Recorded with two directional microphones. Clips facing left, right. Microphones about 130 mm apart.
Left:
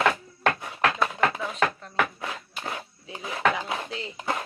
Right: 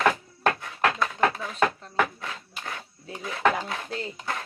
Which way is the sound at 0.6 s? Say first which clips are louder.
Left 1 dB; 15° left (ahead or behind).